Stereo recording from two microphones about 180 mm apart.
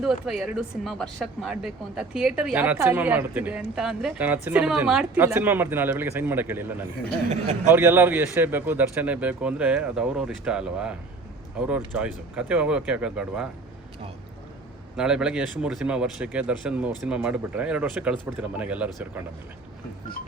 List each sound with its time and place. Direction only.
0.0 s speech: centre (ahead or behind)
14.9 s speech: 5° right (ahead or behind)